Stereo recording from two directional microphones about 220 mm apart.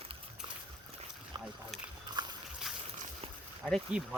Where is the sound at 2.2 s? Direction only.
20° right (ahead or behind).